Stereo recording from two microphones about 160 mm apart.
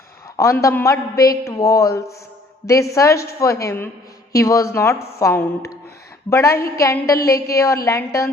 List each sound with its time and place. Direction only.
0.3 s a man's voice: 20° left (ahead or behind)